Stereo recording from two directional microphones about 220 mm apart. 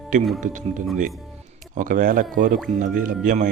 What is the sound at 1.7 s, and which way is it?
Speech, 35° right (ahead or behind).